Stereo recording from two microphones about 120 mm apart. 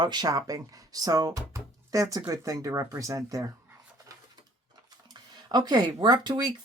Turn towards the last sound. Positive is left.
turn(degrees=-40)  # may be behind; listen again after turning